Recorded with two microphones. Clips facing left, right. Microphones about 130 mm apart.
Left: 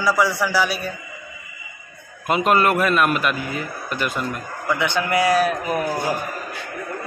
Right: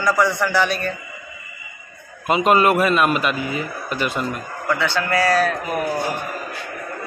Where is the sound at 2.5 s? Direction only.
10° right (ahead or behind).